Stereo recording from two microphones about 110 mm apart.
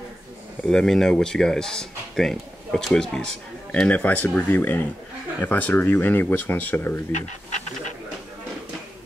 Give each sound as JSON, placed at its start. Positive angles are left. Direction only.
{"t": 0.7, "sound": "speech", "side_deg": 5}
{"t": 7.1, "sound": "speech", "side_deg": 90}